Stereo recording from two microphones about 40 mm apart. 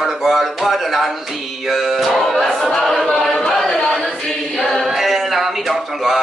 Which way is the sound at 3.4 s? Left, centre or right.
Centre.